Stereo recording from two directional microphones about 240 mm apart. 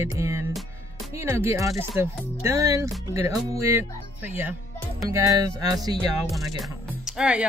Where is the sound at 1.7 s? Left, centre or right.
Centre.